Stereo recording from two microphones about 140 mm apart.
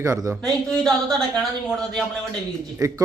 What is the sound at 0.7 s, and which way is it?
A man's voice, 5° left (ahead or behind).